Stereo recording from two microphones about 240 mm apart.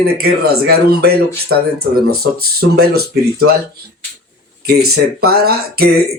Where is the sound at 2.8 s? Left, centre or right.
Right.